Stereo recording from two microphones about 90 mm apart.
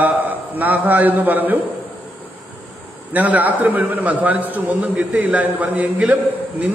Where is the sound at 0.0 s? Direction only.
20° right (ahead or behind).